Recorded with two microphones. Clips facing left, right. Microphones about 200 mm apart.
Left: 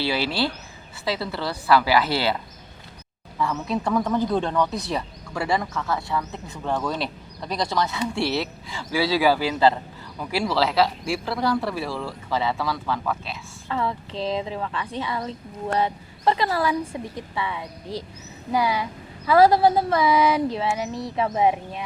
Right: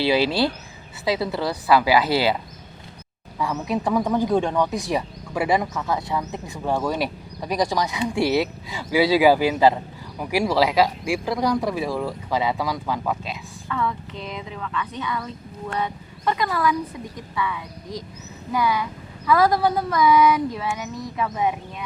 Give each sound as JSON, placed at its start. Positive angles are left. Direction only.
{"t": 0.0, "sound": "speech", "side_deg": -20}
{"t": 13.7, "sound": "speech", "side_deg": 30}